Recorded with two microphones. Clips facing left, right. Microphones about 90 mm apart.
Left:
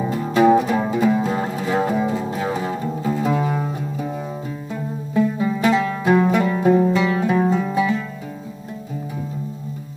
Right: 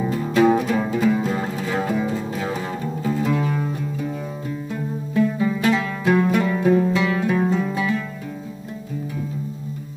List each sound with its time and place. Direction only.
0.1 s music: 20° left (ahead or behind)
5.1 s music: 20° left (ahead or behind)